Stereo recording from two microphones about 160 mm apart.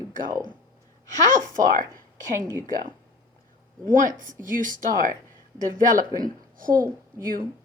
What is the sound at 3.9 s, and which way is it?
A woman's voice, 55° right (ahead or behind).